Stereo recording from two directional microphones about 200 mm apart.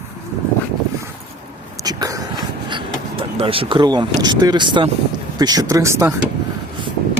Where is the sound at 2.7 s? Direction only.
25° right (ahead or behind).